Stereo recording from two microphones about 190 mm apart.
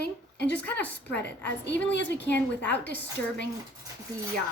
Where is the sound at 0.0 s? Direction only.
60° left (ahead or behind).